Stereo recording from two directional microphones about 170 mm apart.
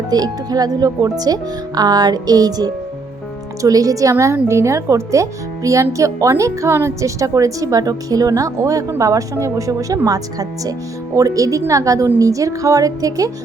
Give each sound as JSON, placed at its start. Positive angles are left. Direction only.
{"t": 0.1, "sound": "a woman's voice", "side_deg": -20}